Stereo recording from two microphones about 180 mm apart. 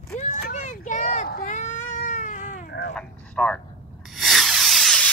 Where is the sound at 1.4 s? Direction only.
40° left (ahead or behind).